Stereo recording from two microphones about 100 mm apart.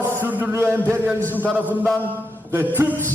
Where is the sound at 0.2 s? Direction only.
20° right (ahead or behind).